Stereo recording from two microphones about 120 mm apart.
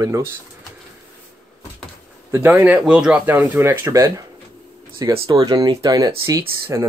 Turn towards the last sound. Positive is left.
turn(degrees=-25)  # may be behind; listen again after turning